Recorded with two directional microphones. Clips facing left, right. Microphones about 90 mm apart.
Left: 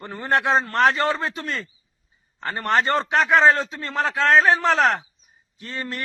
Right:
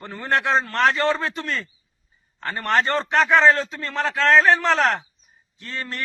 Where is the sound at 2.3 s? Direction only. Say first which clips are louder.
Even; 20° left (ahead or behind).